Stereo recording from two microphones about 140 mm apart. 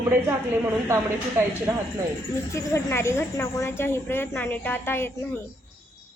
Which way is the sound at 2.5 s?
20° left (ahead or behind).